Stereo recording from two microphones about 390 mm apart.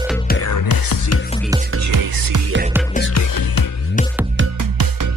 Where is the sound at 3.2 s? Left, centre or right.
Left.